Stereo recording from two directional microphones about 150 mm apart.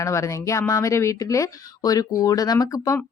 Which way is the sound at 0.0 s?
20° left (ahead or behind).